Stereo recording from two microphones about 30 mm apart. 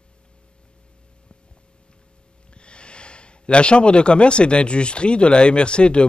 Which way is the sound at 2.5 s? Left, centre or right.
Left.